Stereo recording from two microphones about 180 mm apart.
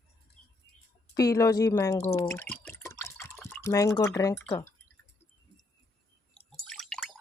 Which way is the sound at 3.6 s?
15° left (ahead or behind).